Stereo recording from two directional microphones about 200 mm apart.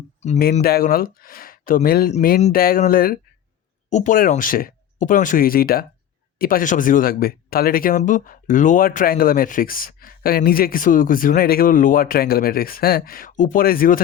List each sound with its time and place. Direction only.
0.6 s speech: 50° left (ahead or behind)